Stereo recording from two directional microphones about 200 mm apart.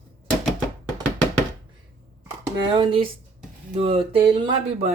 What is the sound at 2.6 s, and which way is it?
Speech, 25° right (ahead or behind).